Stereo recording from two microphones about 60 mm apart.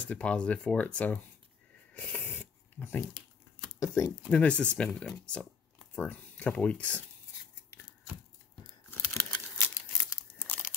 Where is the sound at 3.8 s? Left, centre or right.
Left.